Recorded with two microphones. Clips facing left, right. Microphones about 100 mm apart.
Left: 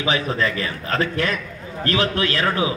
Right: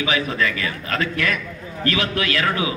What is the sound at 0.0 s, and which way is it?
A man's voice, 35° left (ahead or behind).